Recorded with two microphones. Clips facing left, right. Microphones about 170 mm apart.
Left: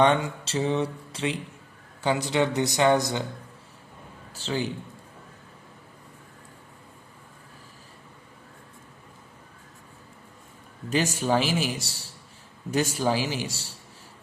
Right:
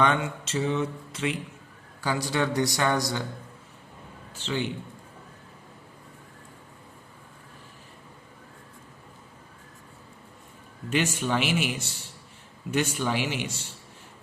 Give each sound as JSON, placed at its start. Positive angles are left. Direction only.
{"t": 0.0, "sound": "a man's voice", "side_deg": 35}
{"t": 4.4, "sound": "speech", "side_deg": 35}
{"t": 10.8, "sound": "speech", "side_deg": 40}